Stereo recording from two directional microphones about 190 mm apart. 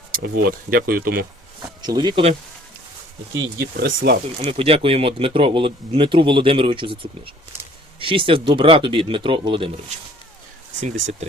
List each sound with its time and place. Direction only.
0.1 s speech: 50° right (ahead or behind)
1.8 s speech: 20° right (ahead or behind)
3.6 s speech: 55° right (ahead or behind)
4.4 s speech: 30° right (ahead or behind)
10.8 s speech: 40° right (ahead or behind)